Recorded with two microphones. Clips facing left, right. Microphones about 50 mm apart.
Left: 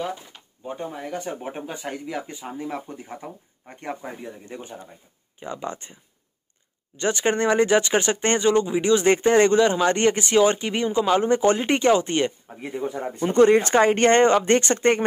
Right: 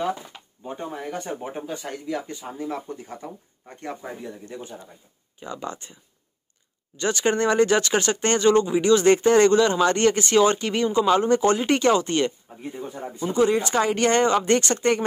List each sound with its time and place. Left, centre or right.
0.7 s speech: centre
1.1 s speech: centre
1.5 s speech: left
7.0 s speech: left
12.5 s speech: left